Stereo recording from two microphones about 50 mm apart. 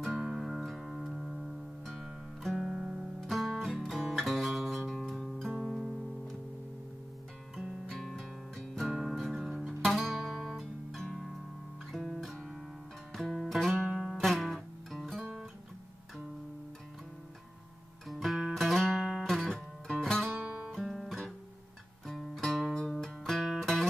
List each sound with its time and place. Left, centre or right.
0.2 s music: centre
7.9 s music: centre
8.8 s music: centre
18.0 s music: centre
19.2 s music: centre
20.3 s music: right
20.8 s guitar: centre
22.0 s music: centre